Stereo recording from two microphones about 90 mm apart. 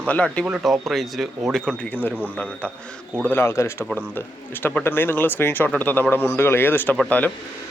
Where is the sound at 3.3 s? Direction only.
30° left (ahead or behind).